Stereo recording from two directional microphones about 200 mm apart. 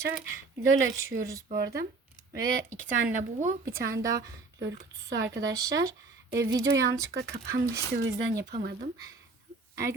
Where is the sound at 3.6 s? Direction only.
15° right (ahead or behind).